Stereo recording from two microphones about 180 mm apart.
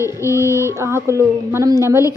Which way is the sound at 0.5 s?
15° right (ahead or behind).